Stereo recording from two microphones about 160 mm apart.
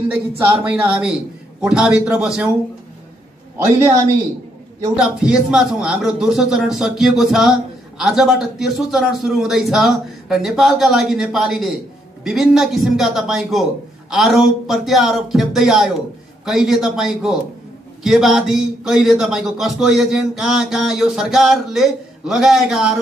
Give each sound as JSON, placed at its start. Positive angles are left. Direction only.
{"t": 0.5, "sound": "a man's voice", "side_deg": -10}
{"t": 3.6, "sound": "speech", "side_deg": -15}
{"t": 4.9, "sound": "a man's voice", "side_deg": -5}